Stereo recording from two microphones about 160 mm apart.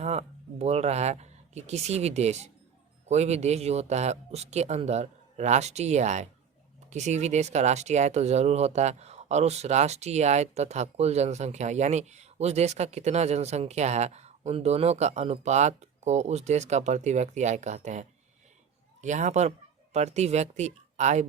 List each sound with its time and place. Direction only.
0.0 s speech: 40° right (ahead or behind)
19.0 s speech: 50° right (ahead or behind)